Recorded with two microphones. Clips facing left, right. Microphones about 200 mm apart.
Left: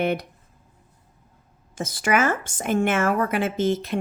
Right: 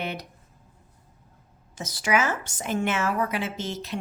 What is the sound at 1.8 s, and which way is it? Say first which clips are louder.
A woman's voice: left 3 dB; 50° left (ahead or behind).